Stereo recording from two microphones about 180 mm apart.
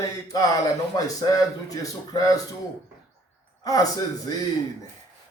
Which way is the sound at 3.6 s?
20° left (ahead or behind).